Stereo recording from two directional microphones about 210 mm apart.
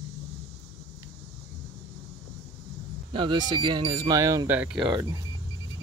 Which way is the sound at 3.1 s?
25° right (ahead or behind).